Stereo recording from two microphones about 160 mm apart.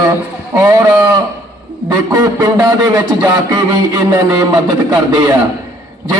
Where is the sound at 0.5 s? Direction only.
20° right (ahead or behind).